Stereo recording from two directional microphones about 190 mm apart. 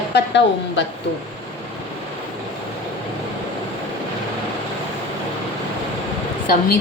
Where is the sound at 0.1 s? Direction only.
65° left (ahead or behind).